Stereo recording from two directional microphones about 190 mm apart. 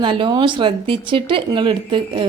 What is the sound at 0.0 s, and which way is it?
A woman's voice, 25° right (ahead or behind).